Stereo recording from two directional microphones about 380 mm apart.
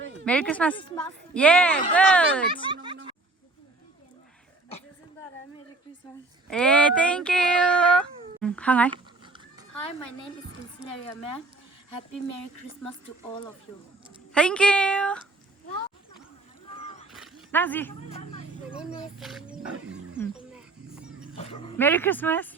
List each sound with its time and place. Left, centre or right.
0.0 s a sound: right
0.3 s speech: centre
2.5 s speech: centre
6.5 s speech: centre
8.9 s goat: centre
14.3 s speech: centre
16.7 s a sound: centre
17.1 s a sound: centre
18.8 s speech: centre
21.3 s speech: centre